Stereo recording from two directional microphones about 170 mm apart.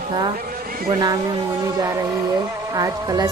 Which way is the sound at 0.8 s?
20° right (ahead or behind).